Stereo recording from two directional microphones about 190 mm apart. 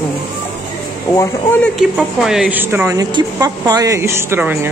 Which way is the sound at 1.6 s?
Centre (ahead or behind).